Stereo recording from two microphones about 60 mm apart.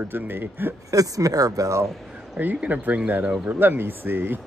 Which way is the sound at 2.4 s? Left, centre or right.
Right.